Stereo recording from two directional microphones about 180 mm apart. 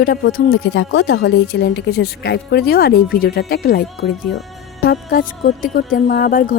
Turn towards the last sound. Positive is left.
turn(degrees=50)  # may be behind; listen again after turning